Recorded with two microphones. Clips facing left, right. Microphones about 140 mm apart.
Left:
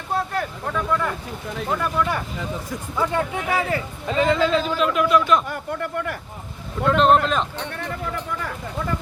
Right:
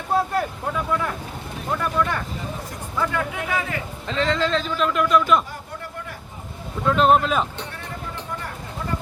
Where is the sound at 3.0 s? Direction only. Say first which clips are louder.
Left 2 dB; 30° left (ahead or behind).